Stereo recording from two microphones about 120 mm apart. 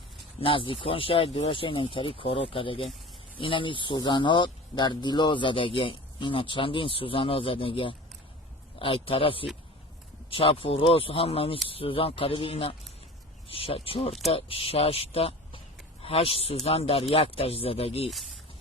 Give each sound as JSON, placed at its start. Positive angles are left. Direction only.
{"t": 0.4, "sound": "a man's voice", "side_deg": 45}